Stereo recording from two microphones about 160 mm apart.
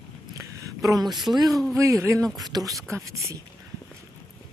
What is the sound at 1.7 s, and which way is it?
Speech, 20° right (ahead or behind).